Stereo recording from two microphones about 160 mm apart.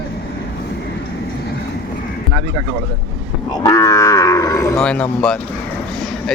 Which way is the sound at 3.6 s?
20° left (ahead or behind).